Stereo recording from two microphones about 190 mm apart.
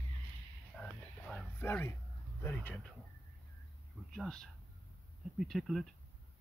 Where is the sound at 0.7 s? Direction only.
5° left (ahead or behind).